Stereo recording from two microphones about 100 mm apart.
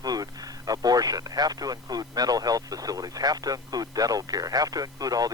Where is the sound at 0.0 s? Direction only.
40° right (ahead or behind).